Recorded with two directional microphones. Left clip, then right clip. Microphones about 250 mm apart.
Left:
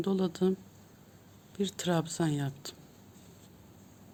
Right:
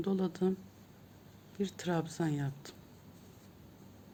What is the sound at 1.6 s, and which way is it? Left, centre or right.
Speech, left.